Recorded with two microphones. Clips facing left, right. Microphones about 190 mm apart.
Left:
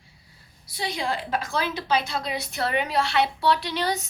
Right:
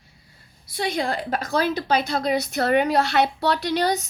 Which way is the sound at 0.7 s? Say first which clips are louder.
Right 4 dB; 50° right (ahead or behind).